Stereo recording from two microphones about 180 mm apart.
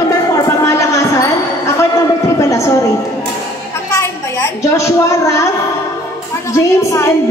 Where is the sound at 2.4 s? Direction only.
15° left (ahead or behind).